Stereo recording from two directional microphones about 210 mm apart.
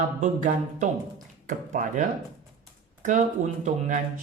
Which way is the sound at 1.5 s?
35° right (ahead or behind).